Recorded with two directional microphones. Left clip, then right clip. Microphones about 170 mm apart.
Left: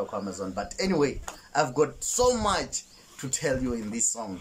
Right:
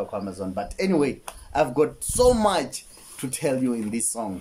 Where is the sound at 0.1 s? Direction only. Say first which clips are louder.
Right 3 dB; 15° right (ahead or behind).